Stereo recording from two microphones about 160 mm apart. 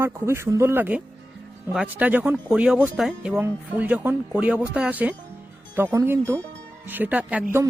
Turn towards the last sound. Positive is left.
turn(degrees=-10)  # may be behind; listen again after turning